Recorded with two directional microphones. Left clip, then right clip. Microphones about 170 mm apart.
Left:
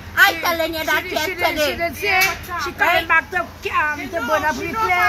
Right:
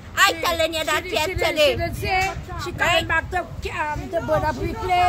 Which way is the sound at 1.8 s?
55° right (ahead or behind).